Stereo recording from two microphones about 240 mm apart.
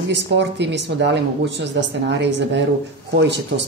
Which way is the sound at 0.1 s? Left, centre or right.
Right.